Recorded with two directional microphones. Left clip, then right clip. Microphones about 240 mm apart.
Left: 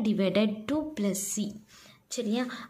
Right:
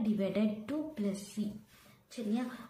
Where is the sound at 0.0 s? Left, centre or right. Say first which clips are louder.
Left 7 dB; left.